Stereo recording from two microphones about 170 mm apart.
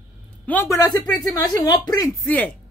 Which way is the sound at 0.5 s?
10° left (ahead or behind).